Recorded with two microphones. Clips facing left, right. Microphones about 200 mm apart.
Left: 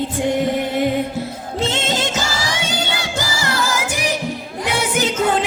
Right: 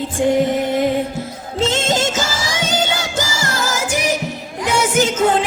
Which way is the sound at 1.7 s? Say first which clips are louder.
Right 4 dB; 45° right (ahead or behind).